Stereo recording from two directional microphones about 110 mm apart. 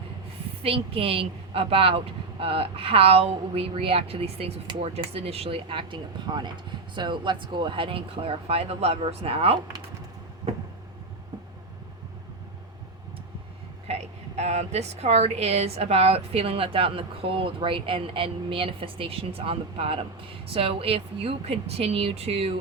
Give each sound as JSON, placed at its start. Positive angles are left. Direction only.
{"t": 0.6, "sound": "a woman's voice", "side_deg": -60}
{"t": 13.8, "sound": "a woman's voice", "side_deg": -80}